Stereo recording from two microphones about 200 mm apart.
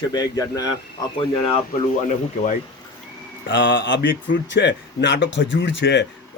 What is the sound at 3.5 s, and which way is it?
Speech, 65° left (ahead or behind).